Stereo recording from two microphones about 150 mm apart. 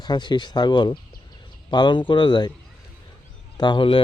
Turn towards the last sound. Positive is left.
turn(degrees=35)  # may be behind; listen again after turning